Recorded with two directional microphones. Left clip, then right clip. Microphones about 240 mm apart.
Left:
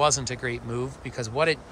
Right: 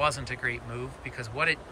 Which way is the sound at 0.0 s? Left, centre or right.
Centre.